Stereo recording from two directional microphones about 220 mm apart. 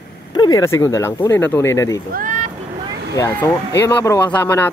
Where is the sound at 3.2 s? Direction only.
10° left (ahead or behind).